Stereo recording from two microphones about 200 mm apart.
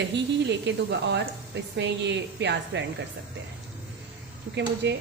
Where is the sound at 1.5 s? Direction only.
60° right (ahead or behind).